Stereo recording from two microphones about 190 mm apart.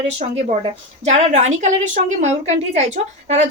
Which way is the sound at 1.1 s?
35° right (ahead or behind).